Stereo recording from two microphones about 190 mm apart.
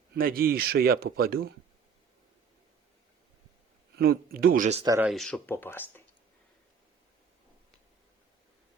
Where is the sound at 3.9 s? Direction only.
50° right (ahead or behind).